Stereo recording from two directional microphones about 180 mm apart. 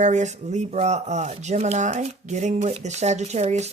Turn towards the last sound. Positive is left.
turn(degrees=-40)  # may be behind; listen again after turning